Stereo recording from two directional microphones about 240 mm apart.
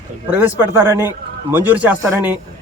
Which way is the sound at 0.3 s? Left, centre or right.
Centre.